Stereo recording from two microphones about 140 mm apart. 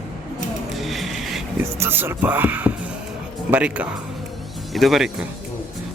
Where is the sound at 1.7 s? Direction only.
15° right (ahead or behind).